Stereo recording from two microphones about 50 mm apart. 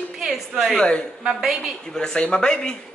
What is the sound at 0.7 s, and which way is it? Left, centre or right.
Speech, centre.